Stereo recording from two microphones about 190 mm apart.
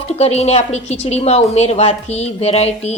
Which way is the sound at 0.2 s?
35° left (ahead or behind).